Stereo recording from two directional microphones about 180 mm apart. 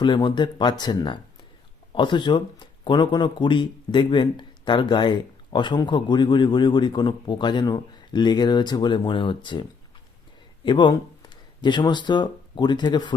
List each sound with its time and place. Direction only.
0.0 s speech: 25° left (ahead or behind)